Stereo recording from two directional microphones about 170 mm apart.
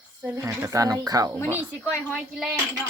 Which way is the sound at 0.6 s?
20° right (ahead or behind).